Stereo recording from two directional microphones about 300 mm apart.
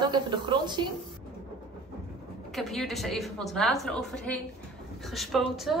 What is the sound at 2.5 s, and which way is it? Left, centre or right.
A woman's voice, centre.